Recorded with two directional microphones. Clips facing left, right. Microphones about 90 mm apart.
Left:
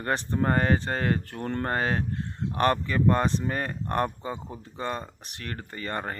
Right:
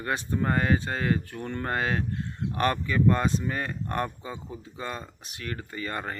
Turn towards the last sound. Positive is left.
turn(degrees=35)  # may be behind; listen again after turning